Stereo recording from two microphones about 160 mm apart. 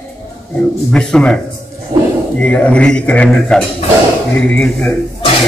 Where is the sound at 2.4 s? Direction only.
10° left (ahead or behind).